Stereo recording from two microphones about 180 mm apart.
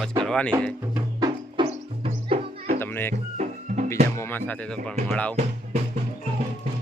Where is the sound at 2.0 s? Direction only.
40° right (ahead or behind).